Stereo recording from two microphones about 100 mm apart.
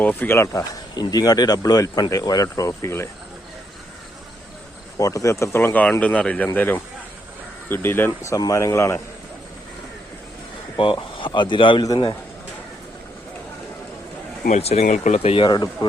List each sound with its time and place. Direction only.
0.0 s speech: 15° left (ahead or behind)
0.3 s speech: 35° left (ahead or behind)
4.9 s speech: 35° left (ahead or behind)
10.8 s speech: 55° left (ahead or behind)
14.6 s speech: 90° left
15.4 s speech: 45° left (ahead or behind)